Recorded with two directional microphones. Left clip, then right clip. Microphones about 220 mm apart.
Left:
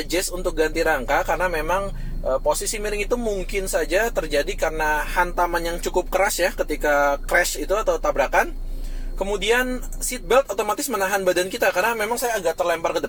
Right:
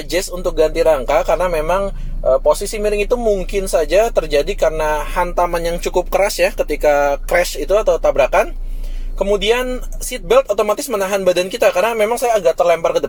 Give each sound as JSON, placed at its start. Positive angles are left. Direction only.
{"t": 0.1, "sound": "speech", "side_deg": -45}